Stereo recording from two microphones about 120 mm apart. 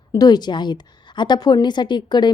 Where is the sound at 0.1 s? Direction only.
35° left (ahead or behind).